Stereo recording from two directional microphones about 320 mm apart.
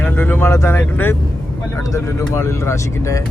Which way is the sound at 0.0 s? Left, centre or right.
Centre.